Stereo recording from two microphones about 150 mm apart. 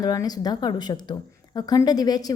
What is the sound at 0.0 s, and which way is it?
A woman's voice, 25° left (ahead or behind).